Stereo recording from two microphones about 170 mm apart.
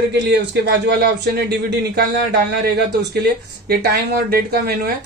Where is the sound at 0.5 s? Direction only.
80° right.